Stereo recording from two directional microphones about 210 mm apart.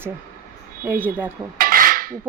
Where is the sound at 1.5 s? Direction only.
45° right (ahead or behind).